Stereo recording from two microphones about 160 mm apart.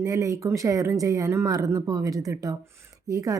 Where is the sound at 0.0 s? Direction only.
20° right (ahead or behind).